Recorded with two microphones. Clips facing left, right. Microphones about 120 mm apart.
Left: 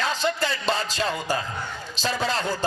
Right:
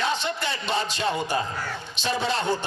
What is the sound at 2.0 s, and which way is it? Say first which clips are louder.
Speech: even; 40° left (ahead or behind).